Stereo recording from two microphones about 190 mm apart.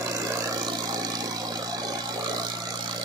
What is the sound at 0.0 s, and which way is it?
Vehicle, 15° right (ahead or behind).